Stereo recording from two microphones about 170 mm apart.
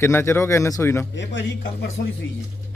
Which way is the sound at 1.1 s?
90° left.